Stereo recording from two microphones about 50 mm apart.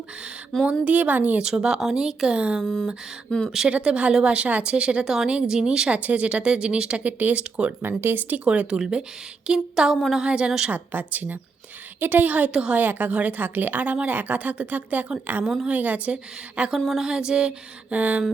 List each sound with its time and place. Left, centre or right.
0.6 s a woman's voice: right
1.4 s speech: centre
2.6 s speech: centre
3.7 s speech: right
5.9 s speech: right
7.2 s a woman's voice: right
7.8 s speech: right
8.4 s speech: centre
10.7 s a woman's voice: right; by 17.5 s centre
17.9 s a woman's voice: right